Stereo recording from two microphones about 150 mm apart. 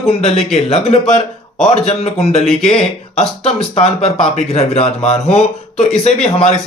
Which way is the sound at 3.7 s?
45° left (ahead or behind).